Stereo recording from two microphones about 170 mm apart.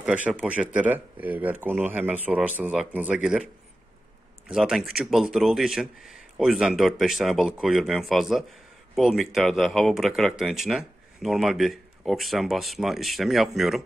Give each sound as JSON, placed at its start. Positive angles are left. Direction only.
{"t": 0.0, "sound": "speech", "side_deg": -5}
{"t": 4.5, "sound": "speech", "side_deg": -5}